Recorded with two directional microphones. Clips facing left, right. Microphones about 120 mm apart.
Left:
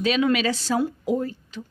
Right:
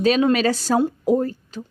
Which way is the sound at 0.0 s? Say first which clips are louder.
Right 4 dB; 40° right (ahead or behind).